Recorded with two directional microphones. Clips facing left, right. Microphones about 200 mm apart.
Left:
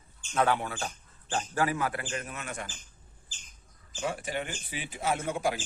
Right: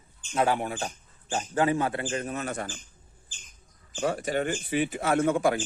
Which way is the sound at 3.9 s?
45° right (ahead or behind).